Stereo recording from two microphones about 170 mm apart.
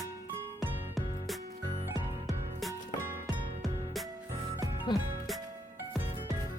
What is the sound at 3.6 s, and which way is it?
Music, centre (ahead or behind).